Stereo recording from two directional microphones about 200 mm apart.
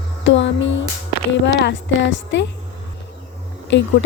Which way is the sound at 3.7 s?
65° left (ahead or behind).